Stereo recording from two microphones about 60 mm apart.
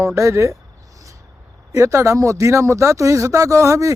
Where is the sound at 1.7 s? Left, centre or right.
Right.